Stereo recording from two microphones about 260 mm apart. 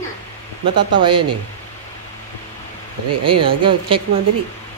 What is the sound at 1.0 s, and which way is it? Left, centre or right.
Speech, centre.